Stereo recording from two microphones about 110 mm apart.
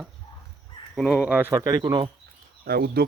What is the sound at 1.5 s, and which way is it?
Speech, 35° right (ahead or behind).